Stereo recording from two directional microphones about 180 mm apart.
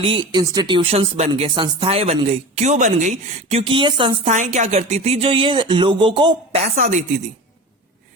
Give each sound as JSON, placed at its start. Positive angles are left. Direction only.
{"t": 0.0, "sound": "speech", "side_deg": -30}
{"t": 3.6, "sound": "speech", "side_deg": -30}
{"t": 4.3, "sound": "speech", "side_deg": -40}